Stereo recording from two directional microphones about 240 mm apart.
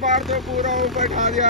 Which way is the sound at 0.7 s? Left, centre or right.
Centre.